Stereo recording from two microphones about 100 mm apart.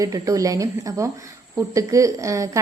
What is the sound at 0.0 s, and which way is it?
A woman's voice, 35° right (ahead or behind).